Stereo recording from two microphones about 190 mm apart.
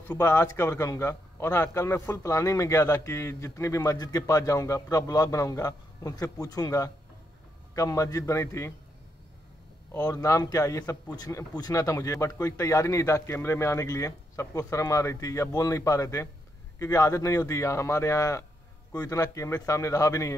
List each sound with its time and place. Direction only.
0.0 s a man's voice: 10° left (ahead or behind)
9.9 s a man's voice: 20° left (ahead or behind)